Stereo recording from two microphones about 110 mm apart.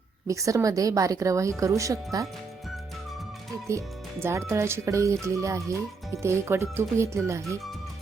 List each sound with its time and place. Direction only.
0.3 s speech: 30° right (ahead or behind)
3.7 s speech: 25° right (ahead or behind)